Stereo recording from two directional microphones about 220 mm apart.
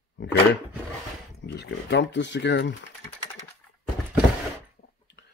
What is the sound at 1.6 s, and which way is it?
Speech, 50° left (ahead or behind).